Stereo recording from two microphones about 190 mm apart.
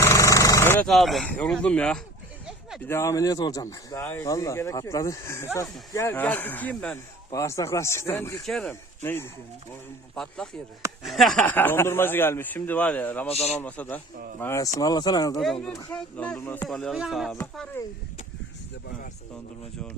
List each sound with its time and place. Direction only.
0.0 s a sound: 15° left (ahead or behind)
0.9 s speech: centre (ahead or behind)
2.5 s a sound: centre (ahead or behind)
2.8 s speech: 15° left (ahead or behind)
8.4 s speech: 5° left (ahead or behind)
10.2 s speech: centre (ahead or behind)
13.2 s a man's voice: 35° left (ahead or behind)
13.6 s speech: 10° left (ahead or behind)
15.9 s speech: 5° left (ahead or behind)
17.8 s speech: 10° left (ahead or behind)